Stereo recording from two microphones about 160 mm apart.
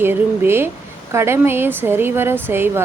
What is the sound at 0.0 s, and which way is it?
A woman's voice, 15° right (ahead or behind).